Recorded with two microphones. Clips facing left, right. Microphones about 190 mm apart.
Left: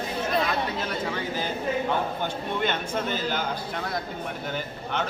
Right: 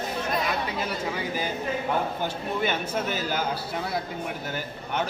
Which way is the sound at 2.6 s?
10° right (ahead or behind).